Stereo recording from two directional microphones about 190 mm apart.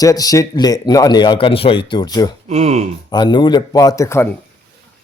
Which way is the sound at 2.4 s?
35° right (ahead or behind).